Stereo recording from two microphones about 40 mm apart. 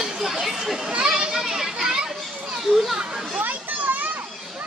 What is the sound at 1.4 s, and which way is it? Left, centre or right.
Children playing, centre.